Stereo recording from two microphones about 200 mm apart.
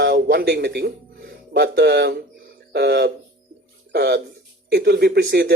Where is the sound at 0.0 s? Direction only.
60° right (ahead or behind).